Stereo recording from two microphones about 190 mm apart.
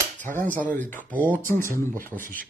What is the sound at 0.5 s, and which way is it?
Speech, 10° left (ahead or behind).